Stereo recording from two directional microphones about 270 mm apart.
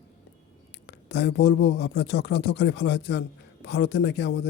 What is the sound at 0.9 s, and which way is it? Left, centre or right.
Speech, left.